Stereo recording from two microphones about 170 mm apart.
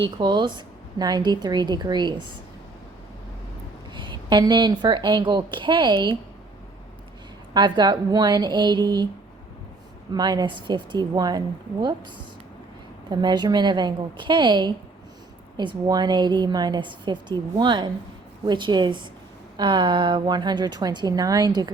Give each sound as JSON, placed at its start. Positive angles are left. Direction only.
{"t": 0.0, "sound": "a woman's voice", "side_deg": -25}
{"t": 3.9, "sound": "a woman's voice", "side_deg": -25}
{"t": 7.5, "sound": "a woman's voice", "side_deg": -25}
{"t": 10.1, "sound": "a woman's voice", "side_deg": -25}